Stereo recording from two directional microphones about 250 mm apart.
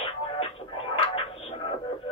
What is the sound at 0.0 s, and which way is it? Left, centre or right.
Music, left.